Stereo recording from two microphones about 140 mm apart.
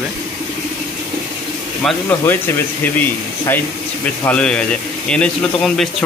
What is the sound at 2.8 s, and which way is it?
Speech, 15° left (ahead or behind).